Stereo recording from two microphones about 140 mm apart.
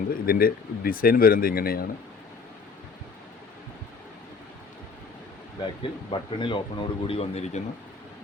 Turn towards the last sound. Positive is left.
turn(degrees=50)  # may be behind; listen again after turning